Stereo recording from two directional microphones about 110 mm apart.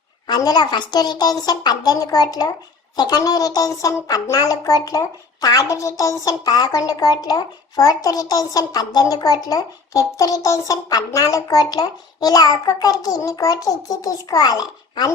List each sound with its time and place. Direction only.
0.3 s speech: 40° left (ahead or behind)